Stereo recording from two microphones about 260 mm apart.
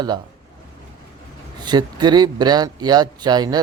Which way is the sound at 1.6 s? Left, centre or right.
Centre.